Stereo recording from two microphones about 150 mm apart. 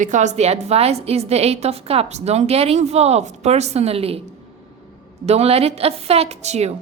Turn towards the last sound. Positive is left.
turn(degrees=-45)  # may be behind; listen again after turning